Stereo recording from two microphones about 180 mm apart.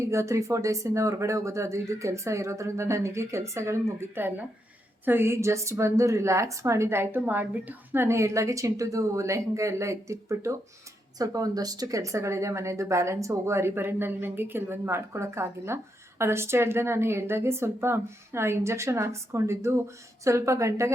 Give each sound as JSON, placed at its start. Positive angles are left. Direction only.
{"t": 0.0, "sound": "speech", "side_deg": -15}